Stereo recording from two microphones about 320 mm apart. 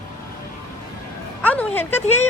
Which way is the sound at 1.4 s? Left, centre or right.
Centre.